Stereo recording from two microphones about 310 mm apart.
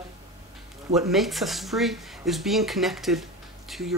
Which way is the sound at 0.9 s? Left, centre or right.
Centre.